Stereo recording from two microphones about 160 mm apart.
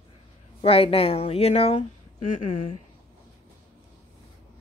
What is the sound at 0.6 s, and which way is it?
Speech, 35° left (ahead or behind).